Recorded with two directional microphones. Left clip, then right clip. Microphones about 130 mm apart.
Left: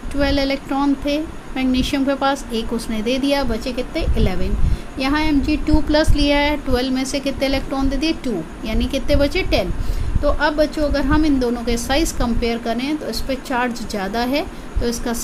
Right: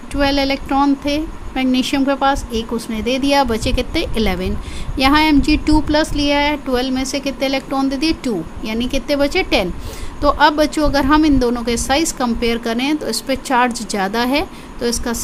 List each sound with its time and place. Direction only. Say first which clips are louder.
0.1 s a woman's voice: right 3 dB; 25° right (ahead or behind)
3.5 s a woman's voice: right 4 dB; 40° right (ahead or behind)
5.9 s a woman's voice: right 1 dB; 20° right (ahead or behind)
10.2 s a woman's voice: right 5 dB; 40° right (ahead or behind); by 15.2 s 25° right (ahead or behind)